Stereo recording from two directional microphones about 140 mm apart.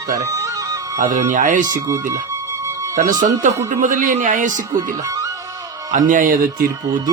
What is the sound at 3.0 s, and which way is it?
Speech, 65° right (ahead or behind).